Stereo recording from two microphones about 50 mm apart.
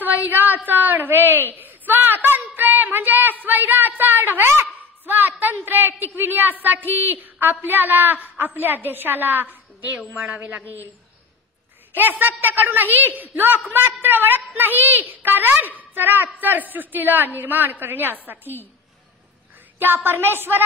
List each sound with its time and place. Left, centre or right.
0.0 s a sound: right
0.7 s a woman's voice: right
1.5 s a sound: right
5.0 s a woman's voice: right
11.9 s a woman's voice: right
19.8 s a woman's voice: right